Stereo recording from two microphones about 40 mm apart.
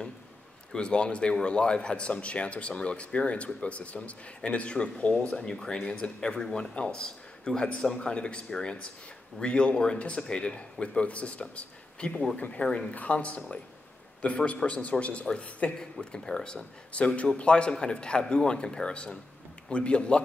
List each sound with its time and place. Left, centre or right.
0.7 s speech: left
5.5 s a man's voice: centre
8.1 s speech: left
12.4 s speech: left
12.6 s speech: centre
12.9 s speech: left
15.8 s speech: left
16.9 s speech: left